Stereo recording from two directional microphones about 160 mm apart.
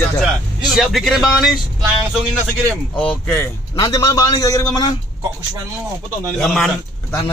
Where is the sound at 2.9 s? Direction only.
10° left (ahead or behind).